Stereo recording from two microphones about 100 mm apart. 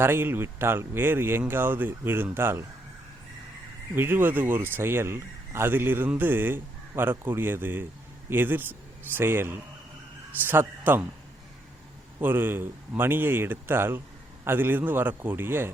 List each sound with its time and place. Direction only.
0.0 s speech: 25° right (ahead or behind)
3.9 s speech: 20° right (ahead or behind)
12.2 s speech: 20° right (ahead or behind)